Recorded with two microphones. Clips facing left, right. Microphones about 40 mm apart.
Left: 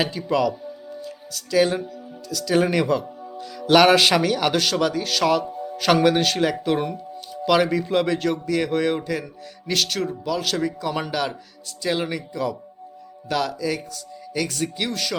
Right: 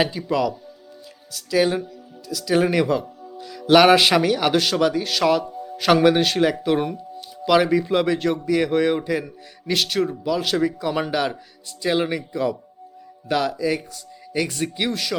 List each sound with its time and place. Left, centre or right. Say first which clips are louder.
0.0 s speech: even; centre